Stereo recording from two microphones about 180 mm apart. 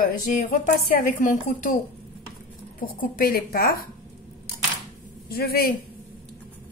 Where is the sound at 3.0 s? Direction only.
55° left (ahead or behind).